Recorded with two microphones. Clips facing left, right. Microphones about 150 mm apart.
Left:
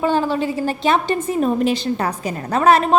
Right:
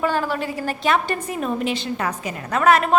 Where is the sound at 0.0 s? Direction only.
25° left (ahead or behind).